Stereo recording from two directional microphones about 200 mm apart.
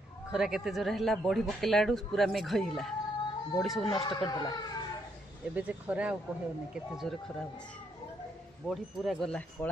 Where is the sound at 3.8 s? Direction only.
25° left (ahead or behind).